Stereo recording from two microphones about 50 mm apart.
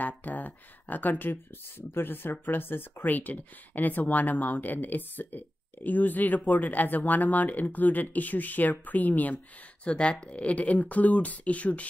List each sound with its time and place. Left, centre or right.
0.0 s speech: left
1.8 s speech: left
9.8 s speech: left